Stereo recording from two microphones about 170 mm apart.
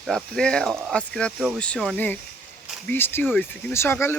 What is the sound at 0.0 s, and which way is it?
Speech, 5° left (ahead or behind).